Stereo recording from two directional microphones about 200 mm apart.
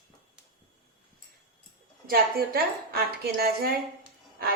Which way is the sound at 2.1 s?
50° right (ahead or behind).